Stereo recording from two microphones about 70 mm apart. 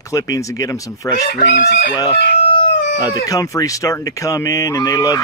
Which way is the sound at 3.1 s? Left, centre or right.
Left.